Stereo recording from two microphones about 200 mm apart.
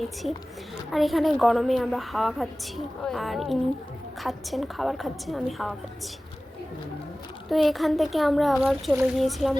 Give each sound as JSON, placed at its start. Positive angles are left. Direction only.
{"t": 0.9, "sound": "a woman's voice", "side_deg": 0}
{"t": 7.5, "sound": "a woman's voice", "side_deg": 0}